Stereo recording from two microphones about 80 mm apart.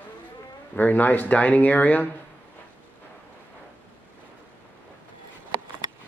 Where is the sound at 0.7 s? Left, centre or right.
Left.